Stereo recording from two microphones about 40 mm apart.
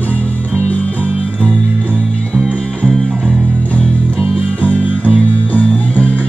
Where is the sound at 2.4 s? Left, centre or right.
Left.